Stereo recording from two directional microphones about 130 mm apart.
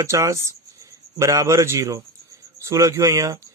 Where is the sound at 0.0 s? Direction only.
25° right (ahead or behind).